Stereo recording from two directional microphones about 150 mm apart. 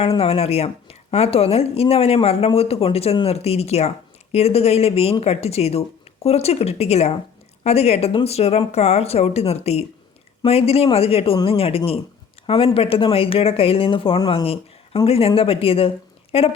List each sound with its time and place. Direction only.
0.0 s a woman's voice: 40° left (ahead or behind)